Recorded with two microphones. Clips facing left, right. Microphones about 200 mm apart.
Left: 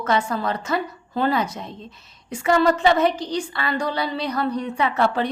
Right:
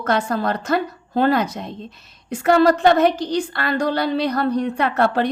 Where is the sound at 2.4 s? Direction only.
65° right (ahead or behind).